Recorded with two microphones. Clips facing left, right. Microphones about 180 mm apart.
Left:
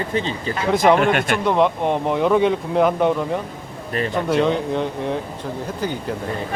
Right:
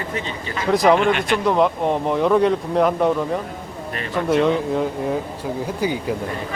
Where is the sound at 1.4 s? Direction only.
Centre (ahead or behind).